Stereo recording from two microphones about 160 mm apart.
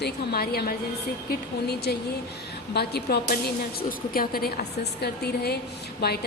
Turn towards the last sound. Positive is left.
turn(degrees=80)